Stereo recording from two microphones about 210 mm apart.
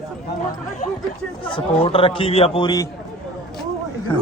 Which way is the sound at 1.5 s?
25° left (ahead or behind).